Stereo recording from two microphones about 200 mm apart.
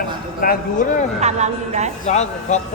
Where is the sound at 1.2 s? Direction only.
35° right (ahead or behind).